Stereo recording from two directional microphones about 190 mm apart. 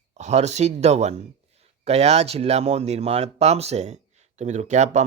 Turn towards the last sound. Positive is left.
turn(degrees=-40)  # may be behind; listen again after turning